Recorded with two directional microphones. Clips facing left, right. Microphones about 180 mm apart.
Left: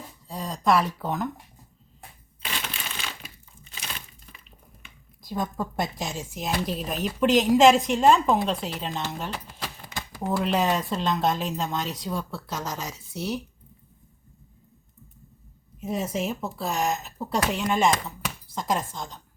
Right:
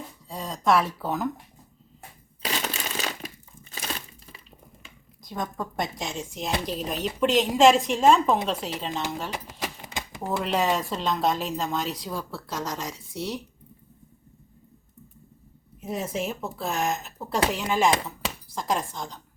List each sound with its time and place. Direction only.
0.3 s speech: centre (ahead or behind)
2.4 s crushing: 40° right (ahead or behind)
5.3 s a woman's voice: 5° left (ahead or behind)
9.6 s a sound: 15° right (ahead or behind)
10.4 s a woman's voice: centre (ahead or behind)
15.8 s a woman's voice: centre (ahead or behind)